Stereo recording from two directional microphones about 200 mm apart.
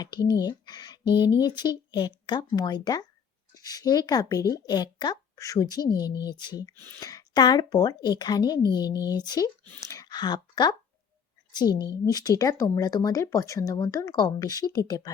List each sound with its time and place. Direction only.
0.0 s speech: 20° left (ahead or behind)
12.1 s speech: 15° left (ahead or behind)